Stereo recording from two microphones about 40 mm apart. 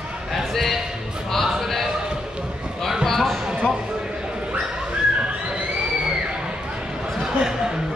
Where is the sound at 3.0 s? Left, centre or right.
Centre.